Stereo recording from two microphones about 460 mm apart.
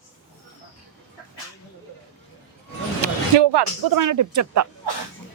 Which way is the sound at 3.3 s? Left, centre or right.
Right.